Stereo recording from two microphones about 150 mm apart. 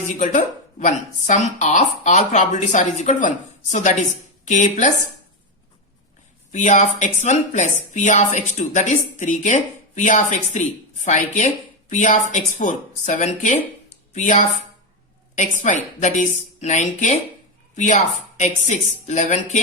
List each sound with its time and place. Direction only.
0.0 s speech: 55° left (ahead or behind)
6.5 s speech: 55° left (ahead or behind)